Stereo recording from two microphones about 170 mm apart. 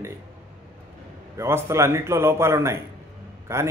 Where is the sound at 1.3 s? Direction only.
15° right (ahead or behind).